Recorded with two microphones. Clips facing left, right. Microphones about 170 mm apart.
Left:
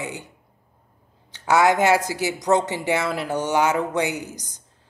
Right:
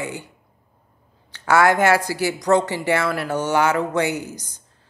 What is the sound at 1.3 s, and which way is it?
Speech, 20° left (ahead or behind).